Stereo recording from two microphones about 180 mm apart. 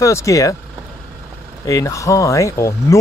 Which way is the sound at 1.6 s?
15° left (ahead or behind).